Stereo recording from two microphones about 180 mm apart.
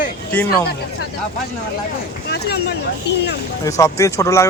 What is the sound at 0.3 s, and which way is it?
Speech, 10° left (ahead or behind).